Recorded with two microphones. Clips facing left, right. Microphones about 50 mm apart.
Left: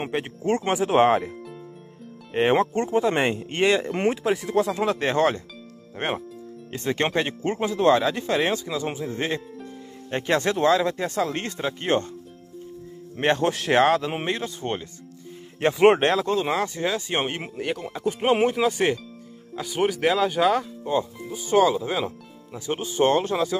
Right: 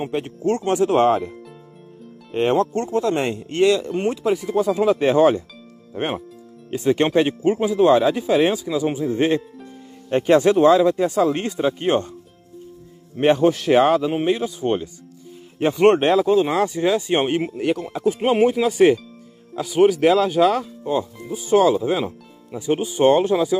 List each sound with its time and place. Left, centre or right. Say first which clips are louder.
0.7 s speech: right 2 dB; centre
2.3 s speech: right 2 dB; left
4.2 s speech: right 2 dB; centre
6.7 s speech: right 7 dB; centre
13.2 s speech: right 6 dB; centre
15.6 s speech: right 2 dB; centre
21.3 s speech: right 6 dB; centre
21.5 s speech: right 3 dB; centre